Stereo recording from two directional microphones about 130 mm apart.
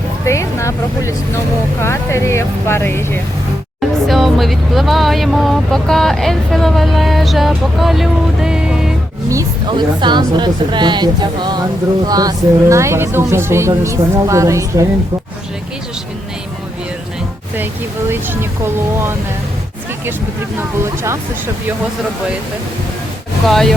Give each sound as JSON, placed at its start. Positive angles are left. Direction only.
{"t": 0.3, "sound": "speech", "side_deg": 20}
{"t": 3.8, "sound": "speech", "side_deg": 0}
{"t": 9.6, "sound": "speech", "side_deg": -35}
{"t": 18.1, "sound": "speech", "side_deg": -20}
{"t": 20.6, "sound": "speech", "side_deg": -20}
{"t": 23.5, "sound": "speech", "side_deg": 5}